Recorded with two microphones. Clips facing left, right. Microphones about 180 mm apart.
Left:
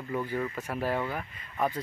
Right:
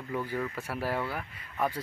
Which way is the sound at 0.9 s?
15° left (ahead or behind).